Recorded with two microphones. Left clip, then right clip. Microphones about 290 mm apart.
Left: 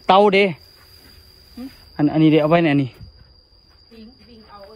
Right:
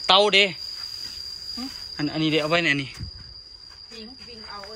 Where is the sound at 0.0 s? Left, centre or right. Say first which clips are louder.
Left 4 dB; centre.